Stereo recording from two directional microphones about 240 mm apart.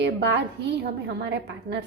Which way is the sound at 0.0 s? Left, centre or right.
Right.